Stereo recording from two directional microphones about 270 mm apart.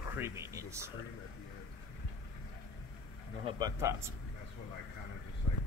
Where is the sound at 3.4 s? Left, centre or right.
Centre.